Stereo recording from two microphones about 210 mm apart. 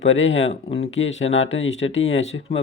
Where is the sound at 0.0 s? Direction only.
65° left (ahead or behind).